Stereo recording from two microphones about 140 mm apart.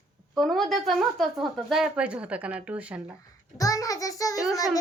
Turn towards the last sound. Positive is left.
turn(degrees=25)  # may be behind; listen again after turning